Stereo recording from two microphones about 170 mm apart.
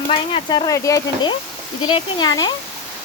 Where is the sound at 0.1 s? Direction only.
30° left (ahead or behind).